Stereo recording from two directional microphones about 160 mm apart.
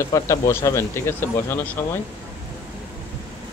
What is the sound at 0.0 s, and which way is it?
Speech, 20° left (ahead or behind).